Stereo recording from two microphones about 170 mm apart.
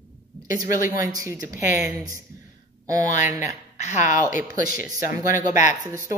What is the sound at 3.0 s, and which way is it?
A woman's voice, 45° left (ahead or behind).